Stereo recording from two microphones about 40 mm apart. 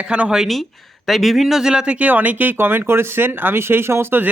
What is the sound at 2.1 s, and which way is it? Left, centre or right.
Speech, right.